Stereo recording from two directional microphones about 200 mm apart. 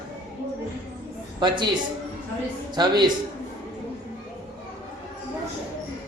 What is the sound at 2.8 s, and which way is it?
Speech, 20° right (ahead or behind).